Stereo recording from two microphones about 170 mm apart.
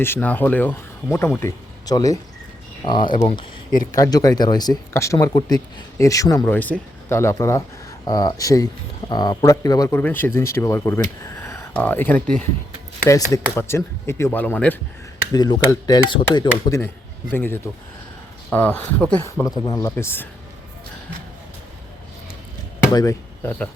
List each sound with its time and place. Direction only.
0.0 s speech: 10° left (ahead or behind)
15.3 s speech: 20° left (ahead or behind)
19.5 s speech: 20° left (ahead or behind)
23.0 s speech: 15° left (ahead or behind)